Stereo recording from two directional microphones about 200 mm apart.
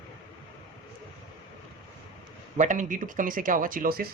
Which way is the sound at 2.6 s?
40° right (ahead or behind).